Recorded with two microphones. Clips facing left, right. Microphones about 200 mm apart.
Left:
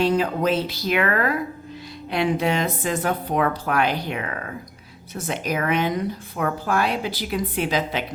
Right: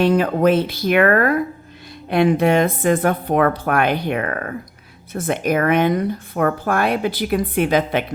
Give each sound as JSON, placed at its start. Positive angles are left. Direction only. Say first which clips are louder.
{"t": 0.0, "sound": "speech", "louder": "right 5 dB", "side_deg": -60}